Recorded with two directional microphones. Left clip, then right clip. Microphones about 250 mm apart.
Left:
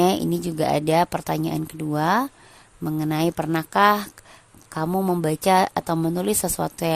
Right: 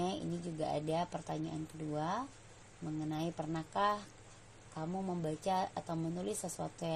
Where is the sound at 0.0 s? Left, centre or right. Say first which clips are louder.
Left 18 dB; left.